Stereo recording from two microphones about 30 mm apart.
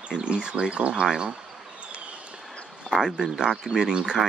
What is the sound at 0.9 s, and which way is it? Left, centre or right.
Speech, right.